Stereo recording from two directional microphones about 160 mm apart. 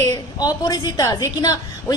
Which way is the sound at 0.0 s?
20° left (ahead or behind).